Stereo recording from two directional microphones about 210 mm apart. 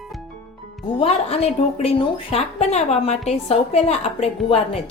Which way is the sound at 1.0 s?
30° left (ahead or behind).